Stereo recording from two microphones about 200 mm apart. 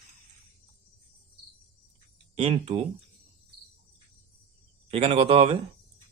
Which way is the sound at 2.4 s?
30° right (ahead or behind).